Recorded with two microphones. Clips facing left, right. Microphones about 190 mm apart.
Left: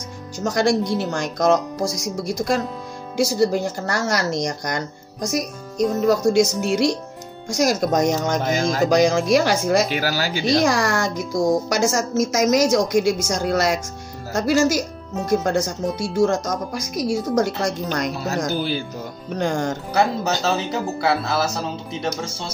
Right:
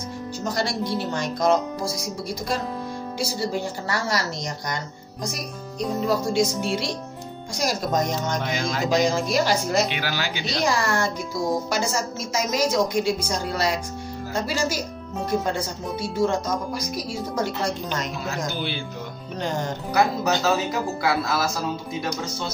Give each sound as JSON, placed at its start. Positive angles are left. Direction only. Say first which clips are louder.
{"t": 0.4, "sound": "speech", "louder": "left 8 dB", "side_deg": 45}
{"t": 3.9, "sound": "speech", "louder": "left 4 dB", "side_deg": 80}
{"t": 4.5, "sound": "speech", "louder": "left 5 dB", "side_deg": 45}
{"t": 19.9, "sound": "speech", "louder": "even", "side_deg": 30}